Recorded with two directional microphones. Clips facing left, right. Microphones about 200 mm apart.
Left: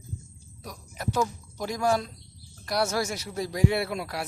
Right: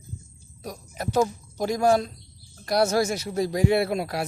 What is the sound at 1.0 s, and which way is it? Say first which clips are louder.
Speech: right 5 dB; 25° right (ahead or behind).